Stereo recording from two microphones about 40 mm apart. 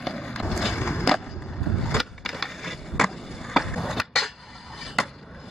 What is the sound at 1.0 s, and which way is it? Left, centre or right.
Skateboard, centre.